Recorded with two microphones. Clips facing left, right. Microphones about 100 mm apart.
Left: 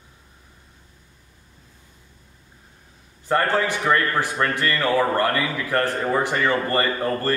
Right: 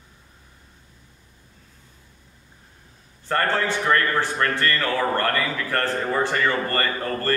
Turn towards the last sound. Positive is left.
turn(degrees=15)  # may be behind; listen again after turning